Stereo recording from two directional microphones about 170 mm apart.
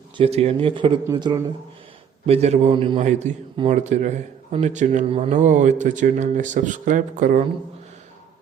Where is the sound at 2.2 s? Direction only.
40° right (ahead or behind).